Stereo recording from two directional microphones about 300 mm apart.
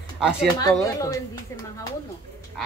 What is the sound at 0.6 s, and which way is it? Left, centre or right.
Speech, centre.